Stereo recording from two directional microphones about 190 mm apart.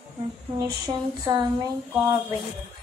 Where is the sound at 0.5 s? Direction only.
20° right (ahead or behind).